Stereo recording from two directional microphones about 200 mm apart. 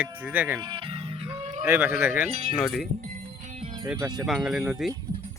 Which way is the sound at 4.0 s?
20° right (ahead or behind).